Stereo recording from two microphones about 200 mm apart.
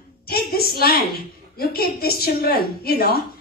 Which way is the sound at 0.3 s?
50° left (ahead or behind).